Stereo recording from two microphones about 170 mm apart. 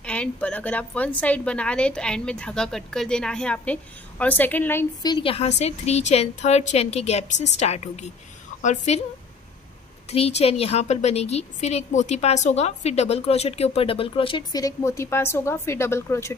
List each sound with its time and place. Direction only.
0.0 s a woman's voice: 5° left (ahead or behind)
5.0 s a woman's voice: 30° left (ahead or behind)
10.0 s a woman's voice: 40° left (ahead or behind)
14.6 s a woman's voice: 15° left (ahead or behind)